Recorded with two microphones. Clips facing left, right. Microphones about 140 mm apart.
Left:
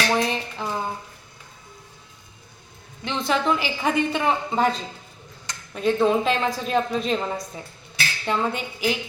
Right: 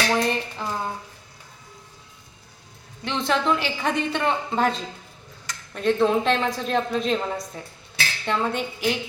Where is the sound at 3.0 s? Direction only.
Centre (ahead or behind).